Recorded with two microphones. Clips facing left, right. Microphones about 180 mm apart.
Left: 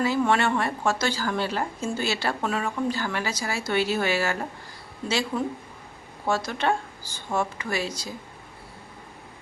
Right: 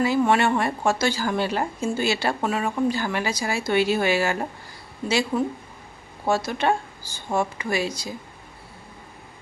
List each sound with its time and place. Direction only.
0.0 s a woman's voice: 15° right (ahead or behind)
6.2 s a woman's voice: 10° right (ahead or behind)